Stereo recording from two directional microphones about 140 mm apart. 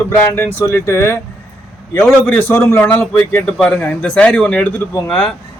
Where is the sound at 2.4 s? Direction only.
15° left (ahead or behind).